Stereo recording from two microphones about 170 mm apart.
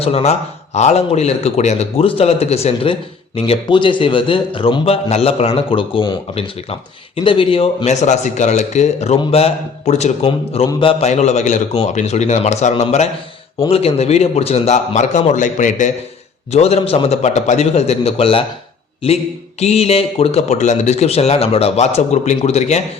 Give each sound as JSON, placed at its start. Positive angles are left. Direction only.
{"t": 0.0, "sound": "speech", "side_deg": 35}
{"t": 11.1, "sound": "speech", "side_deg": 40}